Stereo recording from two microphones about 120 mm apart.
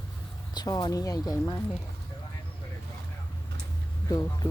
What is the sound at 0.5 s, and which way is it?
Speech, 35° left (ahead or behind).